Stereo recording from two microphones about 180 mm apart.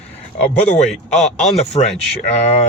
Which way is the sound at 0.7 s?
40° left (ahead or behind).